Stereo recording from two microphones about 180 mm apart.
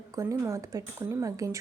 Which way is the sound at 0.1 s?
20° right (ahead or behind).